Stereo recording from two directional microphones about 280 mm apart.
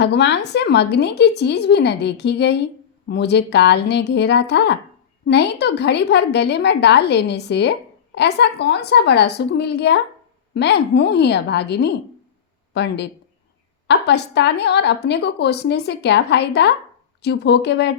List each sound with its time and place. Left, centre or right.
0.0 s a woman's voice: left